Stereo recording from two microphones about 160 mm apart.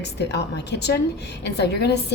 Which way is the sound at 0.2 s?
90° left.